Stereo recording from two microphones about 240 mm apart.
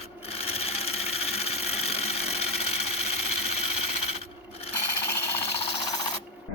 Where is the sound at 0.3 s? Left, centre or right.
Left.